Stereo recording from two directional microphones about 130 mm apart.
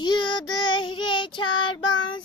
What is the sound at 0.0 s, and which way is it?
Child singing, 35° left (ahead or behind).